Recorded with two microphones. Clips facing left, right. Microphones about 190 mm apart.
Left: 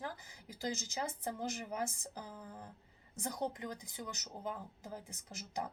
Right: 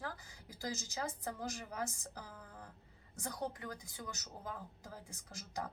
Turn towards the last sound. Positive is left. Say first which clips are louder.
# left 3 dB
turn(degrees=20)  # may be behind; listen again after turning